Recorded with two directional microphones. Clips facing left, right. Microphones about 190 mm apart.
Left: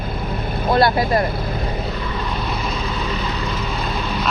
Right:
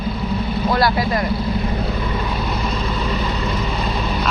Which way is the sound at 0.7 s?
25° left (ahead or behind).